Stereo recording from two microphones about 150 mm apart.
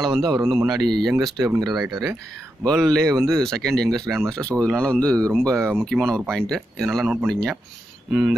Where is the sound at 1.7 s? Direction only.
Centre (ahead or behind).